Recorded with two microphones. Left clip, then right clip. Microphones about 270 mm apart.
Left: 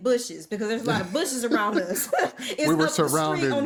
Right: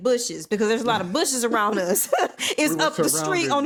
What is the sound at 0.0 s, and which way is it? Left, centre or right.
A woman's voice, right.